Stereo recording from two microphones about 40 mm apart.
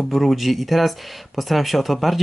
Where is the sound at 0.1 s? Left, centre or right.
Centre.